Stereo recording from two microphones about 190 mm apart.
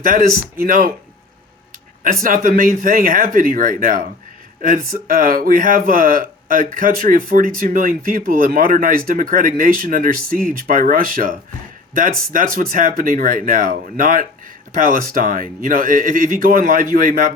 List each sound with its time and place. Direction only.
0.0 s speech: 45° right (ahead or behind)
2.2 s speech: 45° right (ahead or behind)